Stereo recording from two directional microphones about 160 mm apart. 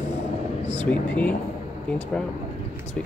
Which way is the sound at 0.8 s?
10° left (ahead or behind).